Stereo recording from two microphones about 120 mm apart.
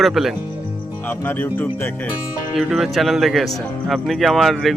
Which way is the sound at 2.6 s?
Centre (ahead or behind).